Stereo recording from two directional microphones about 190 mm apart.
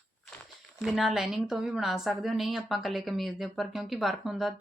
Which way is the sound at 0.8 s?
Centre (ahead or behind).